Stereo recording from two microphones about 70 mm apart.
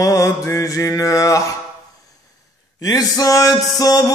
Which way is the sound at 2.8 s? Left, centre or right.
Left.